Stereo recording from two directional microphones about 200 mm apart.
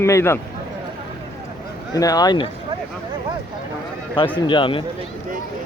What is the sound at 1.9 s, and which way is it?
Speech, 20° left (ahead or behind).